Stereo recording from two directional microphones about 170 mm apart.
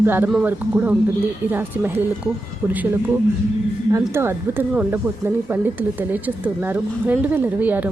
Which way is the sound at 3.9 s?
15° right (ahead or behind).